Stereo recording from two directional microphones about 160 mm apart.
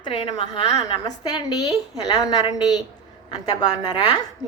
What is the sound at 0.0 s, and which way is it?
A woman's voice, 30° left (ahead or behind).